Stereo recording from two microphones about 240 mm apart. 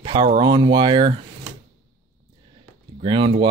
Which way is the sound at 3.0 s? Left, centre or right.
Right.